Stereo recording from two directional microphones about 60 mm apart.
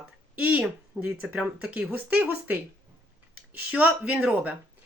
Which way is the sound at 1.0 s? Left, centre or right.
Centre.